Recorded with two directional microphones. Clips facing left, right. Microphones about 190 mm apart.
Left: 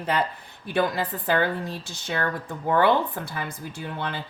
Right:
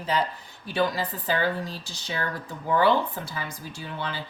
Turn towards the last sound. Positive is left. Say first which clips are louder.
# left 2 dB
turn(degrees=55)  # may be behind; listen again after turning